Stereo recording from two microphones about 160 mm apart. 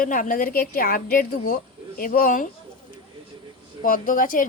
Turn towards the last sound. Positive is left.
turn(degrees=60)  # may be behind; listen again after turning